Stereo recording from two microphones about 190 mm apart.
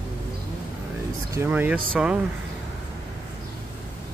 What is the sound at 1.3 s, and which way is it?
Speech, 10° right (ahead or behind).